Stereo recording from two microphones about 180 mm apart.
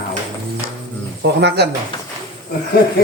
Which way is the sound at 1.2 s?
65° right (ahead or behind).